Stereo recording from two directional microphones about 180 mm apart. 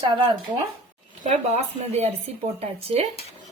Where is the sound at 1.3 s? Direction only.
35° right (ahead or behind).